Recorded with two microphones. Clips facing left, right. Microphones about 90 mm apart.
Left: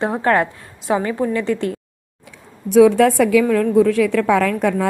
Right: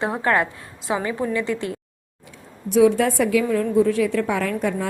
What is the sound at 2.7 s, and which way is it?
Speech, 90° left.